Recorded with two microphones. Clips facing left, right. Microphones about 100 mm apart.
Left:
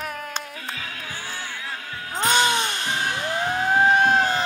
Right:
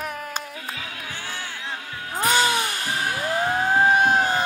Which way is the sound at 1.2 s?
25° left (ahead or behind).